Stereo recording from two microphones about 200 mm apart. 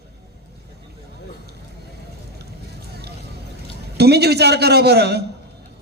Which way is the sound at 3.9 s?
55° right (ahead or behind).